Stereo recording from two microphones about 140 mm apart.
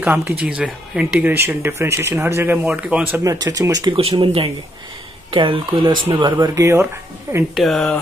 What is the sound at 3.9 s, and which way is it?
Speech, 40° right (ahead or behind).